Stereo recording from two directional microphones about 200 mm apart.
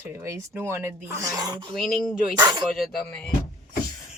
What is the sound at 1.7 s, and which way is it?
Speech, centre (ahead or behind).